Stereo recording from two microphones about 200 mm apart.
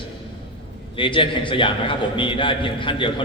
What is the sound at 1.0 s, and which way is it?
A man's voice, 25° left (ahead or behind).